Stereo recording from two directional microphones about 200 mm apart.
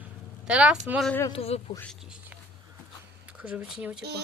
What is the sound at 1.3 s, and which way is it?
Speech, 30° left (ahead or behind).